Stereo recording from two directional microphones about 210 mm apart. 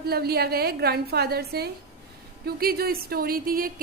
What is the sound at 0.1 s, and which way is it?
A woman's voice, 50° right (ahead or behind).